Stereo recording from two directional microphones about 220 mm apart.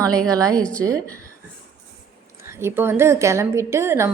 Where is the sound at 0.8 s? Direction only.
15° right (ahead or behind).